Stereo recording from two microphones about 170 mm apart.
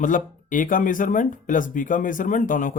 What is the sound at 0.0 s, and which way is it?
Speech, 50° left (ahead or behind).